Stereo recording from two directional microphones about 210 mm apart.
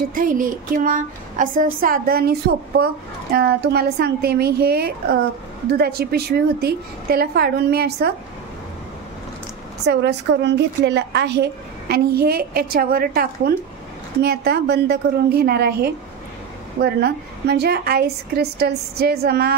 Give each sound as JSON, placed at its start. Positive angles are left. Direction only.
{"t": 0.1, "sound": "a woman's voice", "side_deg": -40}
{"t": 9.8, "sound": "a woman's voice", "side_deg": -55}